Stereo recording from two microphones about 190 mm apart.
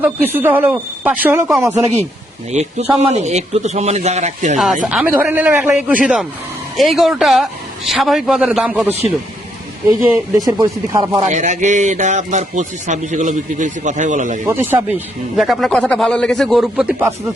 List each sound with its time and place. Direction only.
0.0 s speech: 10° right (ahead or behind)
2.5 s speech: 35° right (ahead or behind)
4.5 s speech: centre (ahead or behind)
10.0 s speech: 20° right (ahead or behind)
11.3 s speech: 40° right (ahead or behind)
14.4 s speech: 10° right (ahead or behind)